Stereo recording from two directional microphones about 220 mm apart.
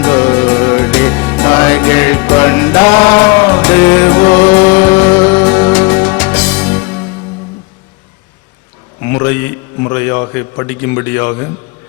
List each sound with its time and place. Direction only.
0.0 s music: 10° left (ahead or behind)
2.8 s music: 25° left (ahead or behind)
3.2 s music: 10° left (ahead or behind)
9.1 s a sound: 10° left (ahead or behind)